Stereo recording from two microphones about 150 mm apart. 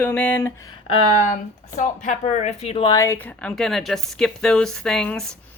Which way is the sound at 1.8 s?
55° left (ahead or behind).